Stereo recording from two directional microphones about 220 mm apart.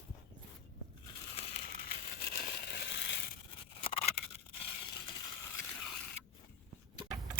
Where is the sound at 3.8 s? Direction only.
25° left (ahead or behind).